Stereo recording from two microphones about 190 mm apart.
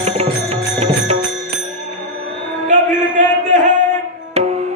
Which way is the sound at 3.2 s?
40° right (ahead or behind).